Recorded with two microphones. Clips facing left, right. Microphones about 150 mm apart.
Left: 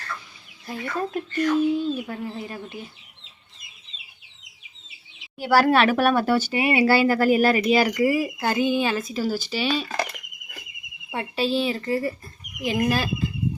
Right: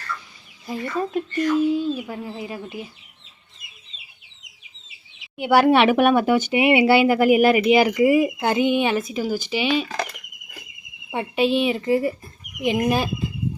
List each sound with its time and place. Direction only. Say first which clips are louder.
0.7 s speech: right 3 dB; centre (ahead or behind)
5.4 s speech: right 3 dB; 20° right (ahead or behind)
11.1 s speech: right 4 dB; 15° right (ahead or behind)